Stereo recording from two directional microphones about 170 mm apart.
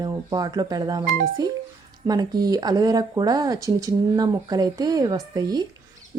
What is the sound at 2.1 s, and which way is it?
Speech, 25° right (ahead or behind).